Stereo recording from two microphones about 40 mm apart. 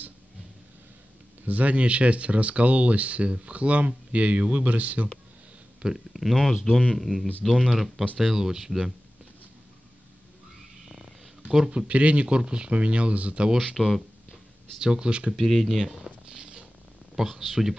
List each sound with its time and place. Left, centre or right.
1.4 s speech: right
5.9 s speech: centre
6.7 s speech: left
7.0 s speech: centre
8.2 s speech: centre
10.9 s a sound: centre
11.7 s speech: right
13.7 s speech: centre
14.3 s speech: centre
15.3 s speech: centre
16.3 s a sound: right
17.1 s speech: centre